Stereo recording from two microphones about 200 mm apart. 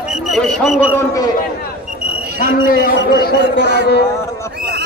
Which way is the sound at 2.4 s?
40° left (ahead or behind).